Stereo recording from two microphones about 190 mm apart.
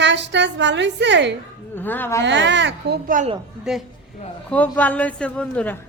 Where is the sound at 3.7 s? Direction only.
5° right (ahead or behind).